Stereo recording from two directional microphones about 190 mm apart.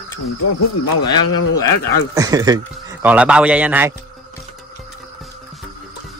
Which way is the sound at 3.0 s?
5° right (ahead or behind).